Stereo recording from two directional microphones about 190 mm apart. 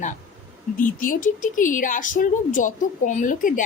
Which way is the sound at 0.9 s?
45° left (ahead or behind).